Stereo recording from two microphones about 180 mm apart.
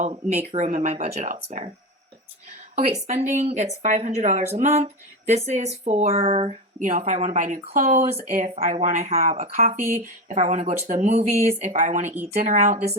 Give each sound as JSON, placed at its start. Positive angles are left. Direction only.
{"t": 0.0, "sound": "speech", "side_deg": -40}
{"t": 3.1, "sound": "speech", "side_deg": -40}